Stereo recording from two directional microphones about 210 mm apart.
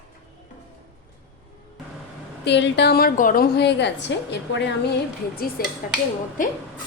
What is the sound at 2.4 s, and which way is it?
A woman's voice, 55° left (ahead or behind).